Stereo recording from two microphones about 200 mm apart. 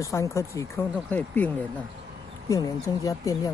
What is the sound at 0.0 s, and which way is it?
Speech, 15° left (ahead or behind).